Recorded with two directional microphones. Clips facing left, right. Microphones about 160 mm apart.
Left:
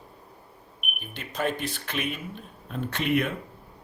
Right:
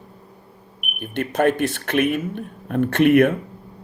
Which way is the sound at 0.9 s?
60° right (ahead or behind).